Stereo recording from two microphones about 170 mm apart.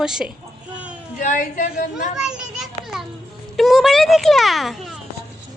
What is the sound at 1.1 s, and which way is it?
Speech, 55° left (ahead or behind).